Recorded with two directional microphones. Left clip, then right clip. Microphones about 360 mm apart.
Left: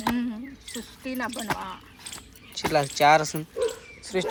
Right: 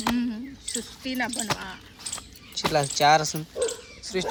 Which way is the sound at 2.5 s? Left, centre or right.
Centre.